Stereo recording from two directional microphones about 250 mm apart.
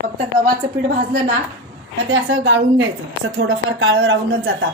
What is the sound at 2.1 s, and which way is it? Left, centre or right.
A woman's voice, right.